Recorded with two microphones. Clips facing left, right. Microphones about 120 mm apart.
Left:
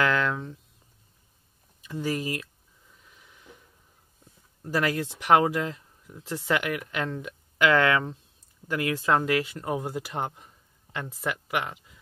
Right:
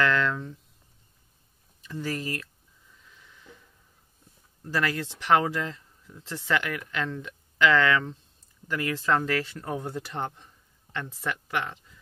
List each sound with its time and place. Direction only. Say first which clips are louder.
0.0 s a sound: even; 10° left (ahead or behind)
1.8 s speech: left 3 dB; 15° left (ahead or behind)
4.6 s speech: left 2 dB; 20° left (ahead or behind)